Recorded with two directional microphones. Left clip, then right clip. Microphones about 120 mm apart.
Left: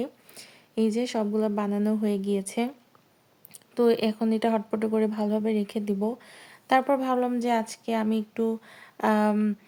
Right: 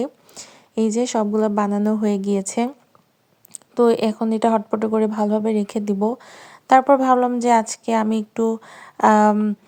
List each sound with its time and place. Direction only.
0.0 s speech: 40° right (ahead or behind)
3.5 s speech: 35° right (ahead or behind)
9.3 s a sound: 20° right (ahead or behind)